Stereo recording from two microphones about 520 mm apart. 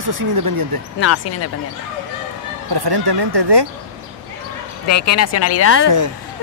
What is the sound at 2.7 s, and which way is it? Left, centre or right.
Speech, right.